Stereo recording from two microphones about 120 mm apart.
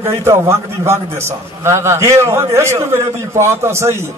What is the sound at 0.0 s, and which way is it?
A man's voice, 25° right (ahead or behind).